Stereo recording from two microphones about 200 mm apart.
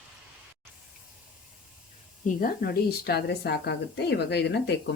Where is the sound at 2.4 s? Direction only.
50° left (ahead or behind).